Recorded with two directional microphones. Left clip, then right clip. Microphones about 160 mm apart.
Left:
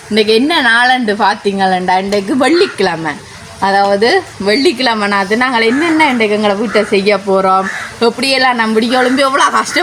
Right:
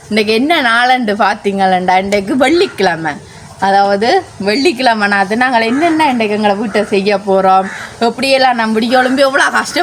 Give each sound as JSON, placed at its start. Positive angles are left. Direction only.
{"t": 0.1, "sound": "a woman's voice", "side_deg": -30}